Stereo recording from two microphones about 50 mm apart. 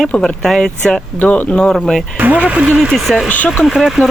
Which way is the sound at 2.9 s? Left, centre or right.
Centre.